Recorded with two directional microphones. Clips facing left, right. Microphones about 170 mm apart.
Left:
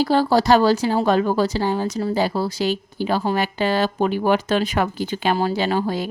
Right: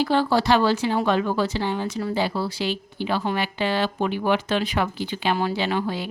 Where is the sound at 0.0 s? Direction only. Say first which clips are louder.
Left 3 dB; 40° left (ahead or behind).